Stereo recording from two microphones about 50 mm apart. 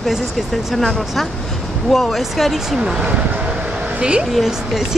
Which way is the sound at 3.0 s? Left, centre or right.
Right.